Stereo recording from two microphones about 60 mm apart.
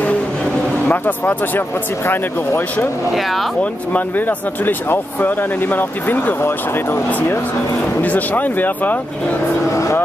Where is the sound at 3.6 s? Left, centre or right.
Left.